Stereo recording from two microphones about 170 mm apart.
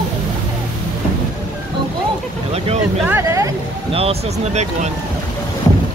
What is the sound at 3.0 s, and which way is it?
Vehicle, 15° right (ahead or behind).